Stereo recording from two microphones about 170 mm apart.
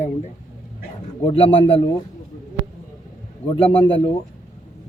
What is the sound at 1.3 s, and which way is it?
Speech, 35° left (ahead or behind).